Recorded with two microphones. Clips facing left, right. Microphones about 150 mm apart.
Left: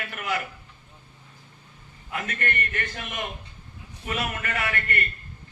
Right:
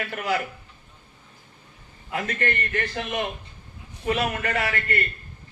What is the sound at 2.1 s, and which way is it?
A man's voice, 35° right (ahead or behind).